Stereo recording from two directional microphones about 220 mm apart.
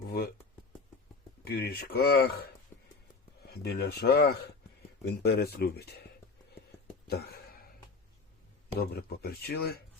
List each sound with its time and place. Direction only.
1.5 s speech: 45° left (ahead or behind)
3.4 s speech: 45° left (ahead or behind)
7.1 s a sound: 45° left (ahead or behind)
8.8 s speech: 45° left (ahead or behind)